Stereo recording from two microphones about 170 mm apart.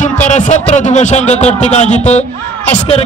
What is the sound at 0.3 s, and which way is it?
A man's voice, 45° left (ahead or behind).